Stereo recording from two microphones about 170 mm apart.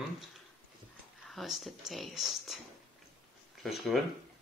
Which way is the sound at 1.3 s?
Centre (ahead or behind).